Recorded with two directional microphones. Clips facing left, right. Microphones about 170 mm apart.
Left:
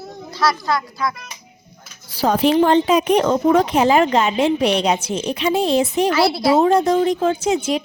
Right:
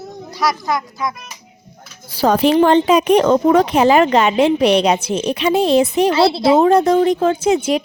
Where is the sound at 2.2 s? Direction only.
75° right (ahead or behind).